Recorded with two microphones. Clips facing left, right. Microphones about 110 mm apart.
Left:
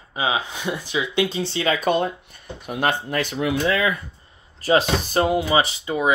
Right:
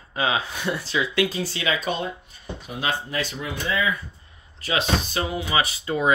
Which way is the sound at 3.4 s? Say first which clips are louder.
Left 6 dB; 85° left.